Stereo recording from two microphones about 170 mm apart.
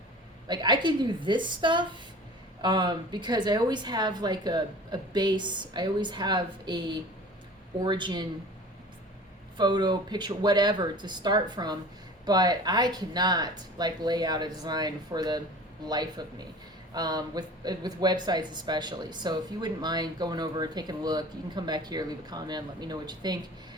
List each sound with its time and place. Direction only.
0.4 s speech: 25° right (ahead or behind)
9.6 s speech: 25° right (ahead or behind)